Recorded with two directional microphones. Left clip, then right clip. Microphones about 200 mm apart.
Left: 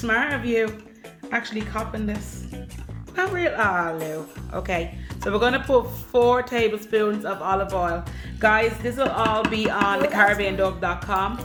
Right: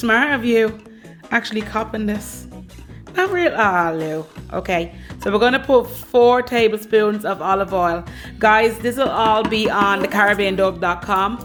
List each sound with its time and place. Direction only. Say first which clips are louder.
0.0 s speech: right 6 dB; 55° right (ahead or behind)
3.2 s speech: right 5 dB; 45° right (ahead or behind)